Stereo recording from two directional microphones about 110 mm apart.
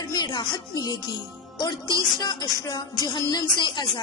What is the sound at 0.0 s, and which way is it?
Music, 40° left (ahead or behind).